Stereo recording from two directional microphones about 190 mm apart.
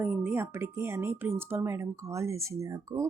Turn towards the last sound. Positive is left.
turn(degrees=-15)  # may be behind; listen again after turning